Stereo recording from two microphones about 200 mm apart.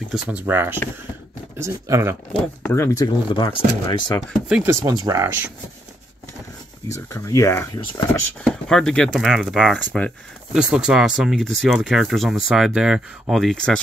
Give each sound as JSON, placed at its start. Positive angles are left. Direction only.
{"t": 0.1, "sound": "speech", "side_deg": -5}
{"t": 2.6, "sound": "speech", "side_deg": 15}
{"t": 4.5, "sound": "speech", "side_deg": -5}
{"t": 4.8, "sound": "speech", "side_deg": -20}
{"t": 6.9, "sound": "speech", "side_deg": 15}